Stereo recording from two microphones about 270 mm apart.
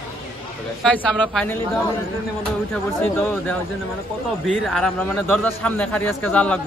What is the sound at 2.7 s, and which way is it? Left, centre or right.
A man's voice, centre.